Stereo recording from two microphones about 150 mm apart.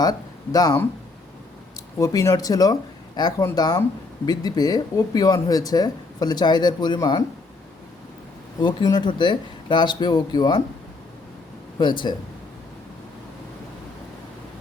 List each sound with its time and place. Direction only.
0.0 s speech: 25° left (ahead or behind)
2.0 s speech: 20° left (ahead or behind)
8.6 s speech: 30° left (ahead or behind)
11.8 s speech: 30° left (ahead or behind)